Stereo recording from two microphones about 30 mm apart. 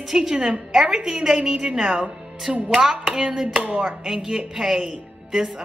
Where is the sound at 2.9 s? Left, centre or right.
Right.